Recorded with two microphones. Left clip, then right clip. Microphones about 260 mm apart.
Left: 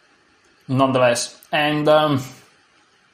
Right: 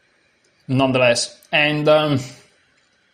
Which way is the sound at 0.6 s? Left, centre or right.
Right.